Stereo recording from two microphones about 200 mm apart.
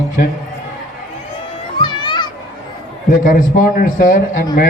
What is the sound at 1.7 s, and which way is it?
Children playing, 20° left (ahead or behind).